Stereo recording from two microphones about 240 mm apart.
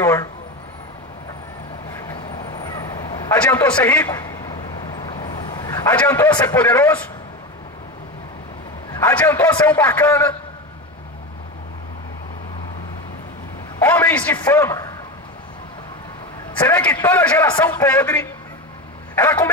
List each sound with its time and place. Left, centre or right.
0.0 s a sound: centre
2.0 s vehicle: centre
3.3 s a sound: centre
8.9 s a man's voice: centre
13.7 s a man's voice: centre
16.6 s a man's voice: centre